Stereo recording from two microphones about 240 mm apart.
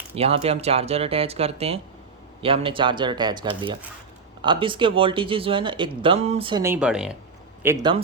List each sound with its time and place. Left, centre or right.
0.1 s speech: right; by 7.1 s centre
7.6 s speech: centre